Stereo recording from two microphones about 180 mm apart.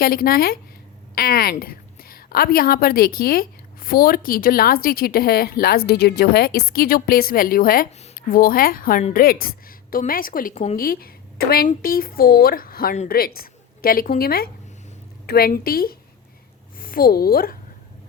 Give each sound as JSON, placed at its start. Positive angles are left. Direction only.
{"t": 0.0, "sound": "a woman's voice", "side_deg": 55}
{"t": 10.8, "sound": "a woman's voice", "side_deg": 55}